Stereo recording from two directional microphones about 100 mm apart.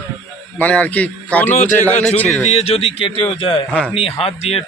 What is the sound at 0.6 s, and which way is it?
A man's voice, 15° left (ahead or behind).